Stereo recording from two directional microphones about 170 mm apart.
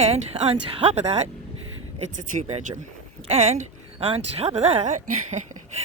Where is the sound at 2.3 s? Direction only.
40° right (ahead or behind).